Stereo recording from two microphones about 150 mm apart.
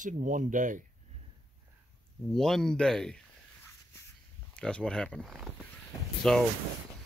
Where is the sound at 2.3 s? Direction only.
5° left (ahead or behind).